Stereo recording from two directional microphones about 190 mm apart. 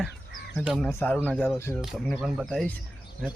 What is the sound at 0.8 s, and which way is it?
Speech, 10° left (ahead or behind).